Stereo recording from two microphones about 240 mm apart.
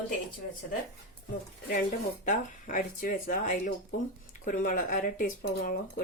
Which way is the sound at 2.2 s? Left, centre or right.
Left.